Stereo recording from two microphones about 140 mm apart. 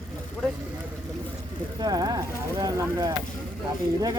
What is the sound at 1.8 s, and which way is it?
Speech, 30° right (ahead or behind).